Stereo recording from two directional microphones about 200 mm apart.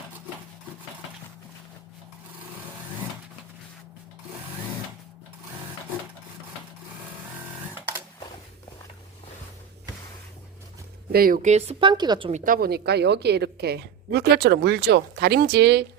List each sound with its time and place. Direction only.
11.1 s speech: 45° right (ahead or behind); by 12.3 s 20° right (ahead or behind)
12.3 s a woman's voice: 45° right (ahead or behind)